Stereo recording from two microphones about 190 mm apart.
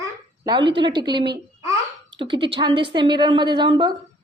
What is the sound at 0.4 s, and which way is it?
A woman's voice, 25° right (ahead or behind).